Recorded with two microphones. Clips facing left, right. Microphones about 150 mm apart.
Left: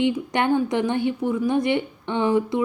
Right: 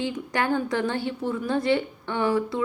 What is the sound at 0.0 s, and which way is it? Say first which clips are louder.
A woman's voice: left 5 dB; 20° left (ahead or behind).